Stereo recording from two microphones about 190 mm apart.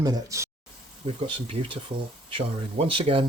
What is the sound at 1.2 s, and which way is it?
Speech, 30° right (ahead or behind).